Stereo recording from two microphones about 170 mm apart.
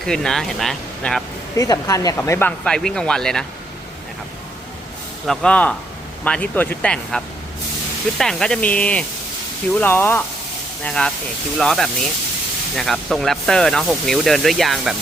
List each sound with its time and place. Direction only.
0.0 s speech: 5° left (ahead or behind)
1.5 s speech: 20° left (ahead or behind)
2.6 s speech: 5° left (ahead or behind)
5.2 s speech: 5° left (ahead or behind)
8.2 s speech: 5° left (ahead or behind)